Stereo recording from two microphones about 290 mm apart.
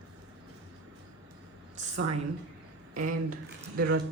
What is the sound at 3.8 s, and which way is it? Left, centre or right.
Speech, right.